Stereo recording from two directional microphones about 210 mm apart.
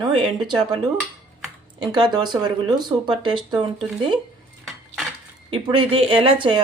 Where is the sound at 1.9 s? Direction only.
20° right (ahead or behind).